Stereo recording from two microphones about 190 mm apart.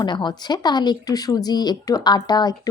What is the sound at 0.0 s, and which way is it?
Speech, 25° left (ahead or behind).